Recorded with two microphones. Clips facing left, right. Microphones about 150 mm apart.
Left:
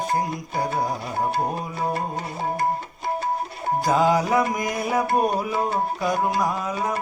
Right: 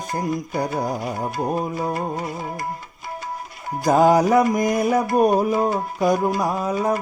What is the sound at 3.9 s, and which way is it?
Music, 45° right (ahead or behind).